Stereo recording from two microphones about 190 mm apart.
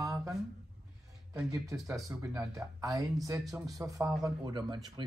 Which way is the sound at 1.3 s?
10° right (ahead or behind).